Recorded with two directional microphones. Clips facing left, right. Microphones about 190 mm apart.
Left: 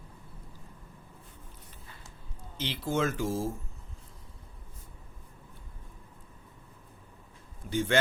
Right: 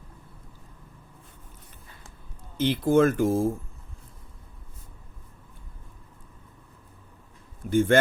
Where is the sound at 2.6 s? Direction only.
55° right (ahead or behind).